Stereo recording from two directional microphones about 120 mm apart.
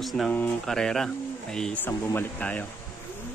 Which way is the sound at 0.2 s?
5° left (ahead or behind).